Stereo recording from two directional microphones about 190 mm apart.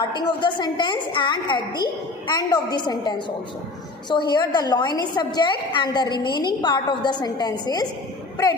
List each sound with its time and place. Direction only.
0.0 s a woman's voice: 20° left (ahead or behind)